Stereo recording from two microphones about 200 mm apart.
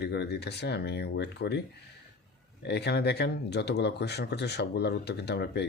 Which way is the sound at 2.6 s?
55° left (ahead or behind).